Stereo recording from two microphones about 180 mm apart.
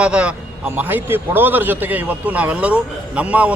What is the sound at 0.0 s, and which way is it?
A man's voice, 5° right (ahead or behind).